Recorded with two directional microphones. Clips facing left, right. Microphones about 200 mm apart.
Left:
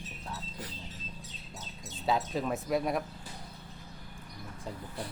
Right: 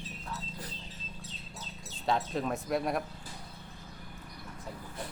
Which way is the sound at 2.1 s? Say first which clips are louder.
Left 1 dB; 5° left (ahead or behind).